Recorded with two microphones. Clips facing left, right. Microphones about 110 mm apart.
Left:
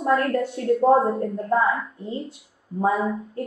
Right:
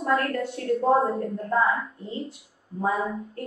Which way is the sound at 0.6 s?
30° left (ahead or behind).